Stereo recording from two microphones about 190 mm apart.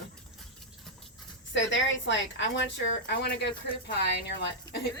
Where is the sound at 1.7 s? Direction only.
75° left (ahead or behind).